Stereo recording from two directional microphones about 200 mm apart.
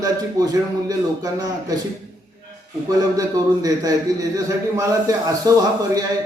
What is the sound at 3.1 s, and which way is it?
Speech, 15° right (ahead or behind).